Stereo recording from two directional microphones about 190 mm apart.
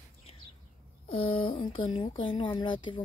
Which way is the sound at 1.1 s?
30° left (ahead or behind).